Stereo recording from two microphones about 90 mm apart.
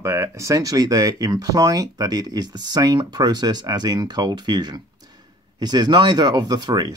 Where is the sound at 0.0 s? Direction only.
35° right (ahead or behind).